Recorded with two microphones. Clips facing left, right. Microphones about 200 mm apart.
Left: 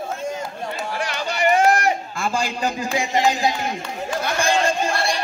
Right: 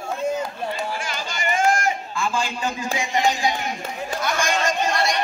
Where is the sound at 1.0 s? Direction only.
65° left (ahead or behind).